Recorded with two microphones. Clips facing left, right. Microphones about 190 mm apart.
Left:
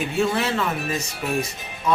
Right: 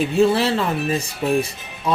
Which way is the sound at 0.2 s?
30° right (ahead or behind).